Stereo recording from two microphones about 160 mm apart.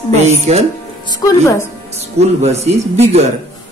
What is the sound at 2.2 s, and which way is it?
A man's voice, 40° right (ahead or behind).